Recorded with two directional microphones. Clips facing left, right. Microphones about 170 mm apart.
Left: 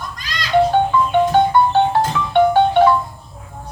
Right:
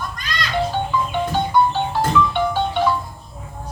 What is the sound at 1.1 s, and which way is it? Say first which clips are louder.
Music: left 8 dB; 60° left (ahead or behind).